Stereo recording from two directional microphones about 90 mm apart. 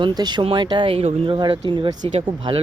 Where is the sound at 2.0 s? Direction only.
75° right (ahead or behind).